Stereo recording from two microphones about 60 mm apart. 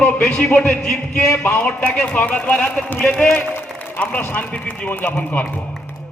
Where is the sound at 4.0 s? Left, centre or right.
Left.